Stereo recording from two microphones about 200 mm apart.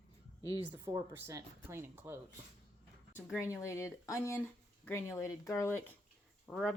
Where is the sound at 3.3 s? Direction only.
15° left (ahead or behind).